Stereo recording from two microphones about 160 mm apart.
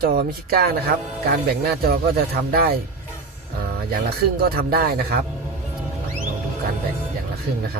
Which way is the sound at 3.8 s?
70° right (ahead or behind).